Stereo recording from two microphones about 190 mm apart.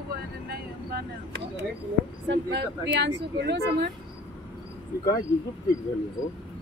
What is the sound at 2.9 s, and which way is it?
Speech, 65° right (ahead or behind).